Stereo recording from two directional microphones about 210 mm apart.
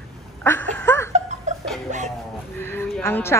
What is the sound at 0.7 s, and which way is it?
Laughter, 10° left (ahead or behind).